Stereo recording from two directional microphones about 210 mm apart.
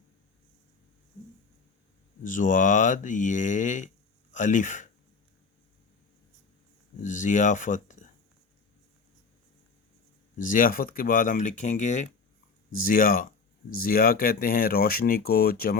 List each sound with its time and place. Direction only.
2.2 s speech: 40° left (ahead or behind)
7.0 s speech: 35° left (ahead or behind)
10.3 s speech: 40° left (ahead or behind)